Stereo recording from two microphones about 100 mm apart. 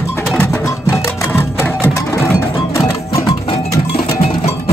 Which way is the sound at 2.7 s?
30° left (ahead or behind).